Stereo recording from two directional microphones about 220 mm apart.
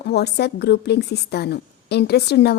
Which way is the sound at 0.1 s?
50° left (ahead or behind).